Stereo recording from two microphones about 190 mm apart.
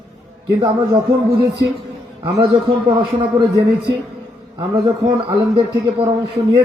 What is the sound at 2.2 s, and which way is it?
A man's voice, 25° right (ahead or behind).